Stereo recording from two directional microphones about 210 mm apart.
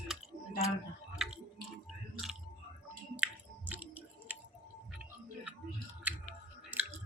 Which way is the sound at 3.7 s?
10° right (ahead or behind).